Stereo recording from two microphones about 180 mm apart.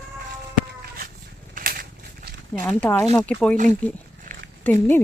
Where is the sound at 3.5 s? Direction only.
40° right (ahead or behind).